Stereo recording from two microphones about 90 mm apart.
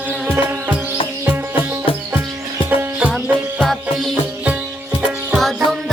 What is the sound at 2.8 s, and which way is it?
Music, 15° right (ahead or behind).